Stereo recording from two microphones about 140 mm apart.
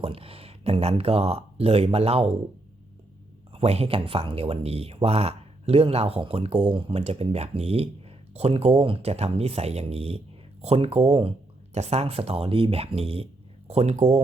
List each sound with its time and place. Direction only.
0.0 s speech: 45° right (ahead or behind)
3.5 s speech: 45° right (ahead or behind)